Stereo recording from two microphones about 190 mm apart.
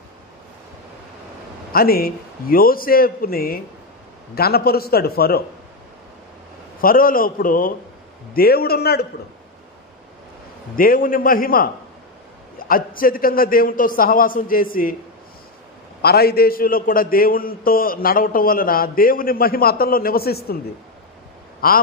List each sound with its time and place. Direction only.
1.7 s a man's voice: 50° left (ahead or behind)
6.8 s a man's voice: 50° left (ahead or behind)
10.8 s a man's voice: 45° left (ahead or behind)
16.0 s a man's voice: 55° left (ahead or behind)
21.6 s a man's voice: 50° left (ahead or behind)